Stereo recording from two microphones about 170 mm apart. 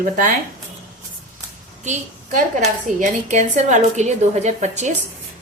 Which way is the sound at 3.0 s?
45° right (ahead or behind).